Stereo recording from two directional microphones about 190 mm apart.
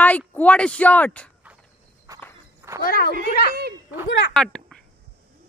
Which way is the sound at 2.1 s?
20° right (ahead or behind).